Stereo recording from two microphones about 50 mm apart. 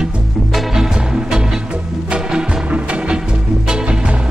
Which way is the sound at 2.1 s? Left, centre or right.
Right.